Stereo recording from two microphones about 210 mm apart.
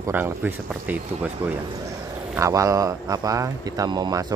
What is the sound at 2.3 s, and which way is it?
Speech, 15° right (ahead or behind).